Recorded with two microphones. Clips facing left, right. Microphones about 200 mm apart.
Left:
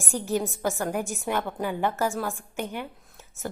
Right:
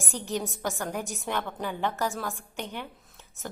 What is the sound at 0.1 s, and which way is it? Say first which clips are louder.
Speech: left 5 dB; 15° left (ahead or behind).